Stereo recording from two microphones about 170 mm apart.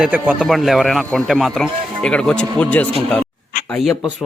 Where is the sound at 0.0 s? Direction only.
5° right (ahead or behind).